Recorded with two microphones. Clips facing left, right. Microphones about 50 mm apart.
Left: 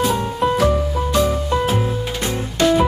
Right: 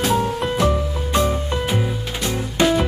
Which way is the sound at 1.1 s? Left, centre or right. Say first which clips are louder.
Left 1 dB; centre.